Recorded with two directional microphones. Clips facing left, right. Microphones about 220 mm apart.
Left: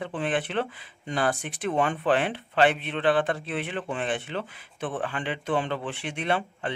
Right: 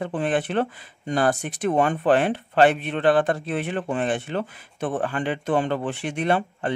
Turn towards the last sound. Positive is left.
turn(degrees=-45)  # may be behind; listen again after turning